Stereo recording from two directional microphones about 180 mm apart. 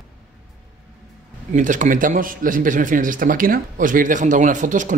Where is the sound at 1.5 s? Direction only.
45° right (ahead or behind).